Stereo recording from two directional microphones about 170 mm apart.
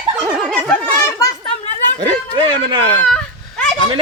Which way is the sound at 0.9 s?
20° left (ahead or behind).